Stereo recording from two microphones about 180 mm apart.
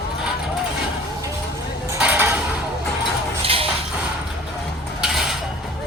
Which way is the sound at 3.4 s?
30° right (ahead or behind).